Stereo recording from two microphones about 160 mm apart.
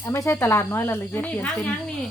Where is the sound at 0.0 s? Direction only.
15° left (ahead or behind).